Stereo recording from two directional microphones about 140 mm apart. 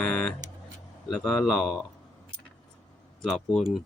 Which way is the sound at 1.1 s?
5° left (ahead or behind).